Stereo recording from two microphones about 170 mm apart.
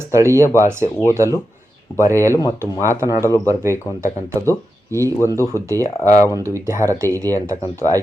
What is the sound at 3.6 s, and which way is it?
Speech, 15° right (ahead or behind).